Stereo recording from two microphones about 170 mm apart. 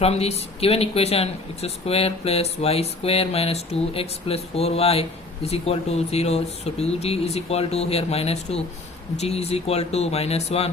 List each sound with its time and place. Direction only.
0.0 s speech: 35° left (ahead or behind)